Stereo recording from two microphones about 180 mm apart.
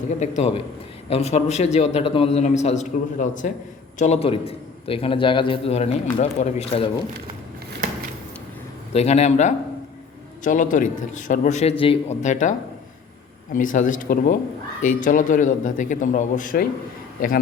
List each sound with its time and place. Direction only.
0.2 s a man's voice: 35° left (ahead or behind)
8.9 s a man's voice: 35° left (ahead or behind)